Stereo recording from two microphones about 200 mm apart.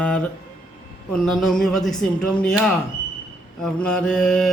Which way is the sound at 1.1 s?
Centre (ahead or behind).